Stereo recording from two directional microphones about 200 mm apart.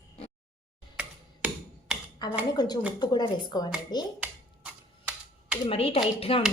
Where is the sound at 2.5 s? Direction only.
20° left (ahead or behind).